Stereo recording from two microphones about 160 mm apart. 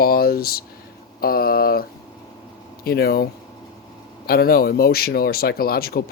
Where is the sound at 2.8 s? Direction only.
75° left (ahead or behind).